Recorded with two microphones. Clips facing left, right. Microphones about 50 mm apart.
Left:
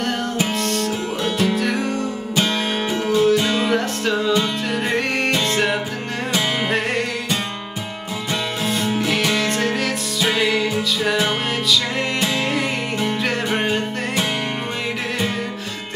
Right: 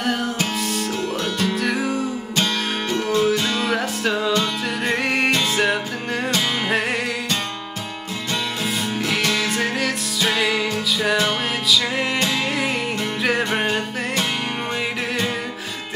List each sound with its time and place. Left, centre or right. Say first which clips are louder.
0.6 s music: left 2 dB; centre
2.3 s music: left 3 dB; centre
4.3 s music: left 2 dB; centre
4.9 s music: right 2 dB; centre
8.6 s music: left 5 dB; centre